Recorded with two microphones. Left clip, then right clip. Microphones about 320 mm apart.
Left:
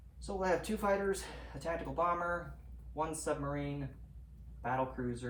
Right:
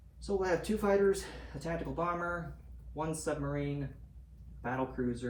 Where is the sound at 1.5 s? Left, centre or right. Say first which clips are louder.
Even; centre.